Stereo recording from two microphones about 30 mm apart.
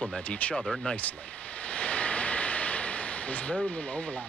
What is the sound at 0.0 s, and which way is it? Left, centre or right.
Speech, left.